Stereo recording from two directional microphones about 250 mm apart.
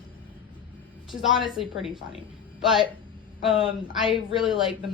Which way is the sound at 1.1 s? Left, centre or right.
Centre.